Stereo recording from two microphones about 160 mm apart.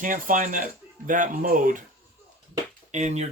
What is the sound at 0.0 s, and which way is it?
Speech, 55° right (ahead or behind).